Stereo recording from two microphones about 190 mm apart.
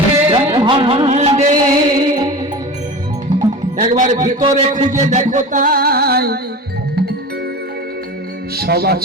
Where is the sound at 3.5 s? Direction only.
40° right (ahead or behind).